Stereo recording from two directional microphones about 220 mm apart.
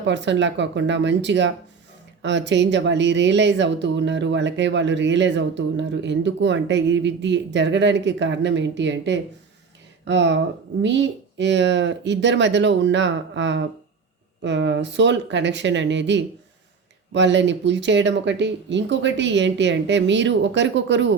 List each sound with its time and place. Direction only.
0.0 s speech: 55° right (ahead or behind)